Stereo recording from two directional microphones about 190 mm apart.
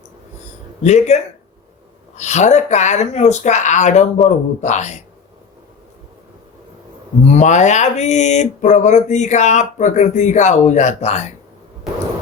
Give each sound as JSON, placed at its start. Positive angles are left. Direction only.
{"t": 0.8, "sound": "speech", "side_deg": 35}
{"t": 7.3, "sound": "speech", "side_deg": 40}